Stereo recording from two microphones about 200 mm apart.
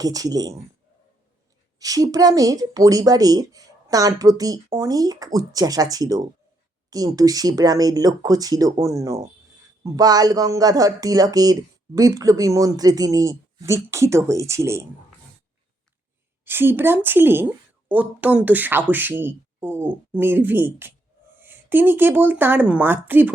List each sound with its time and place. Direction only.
0.0 s speech: 20° right (ahead or behind)
1.8 s speech: 15° right (ahead or behind)
16.4 s speech: 10° right (ahead or behind)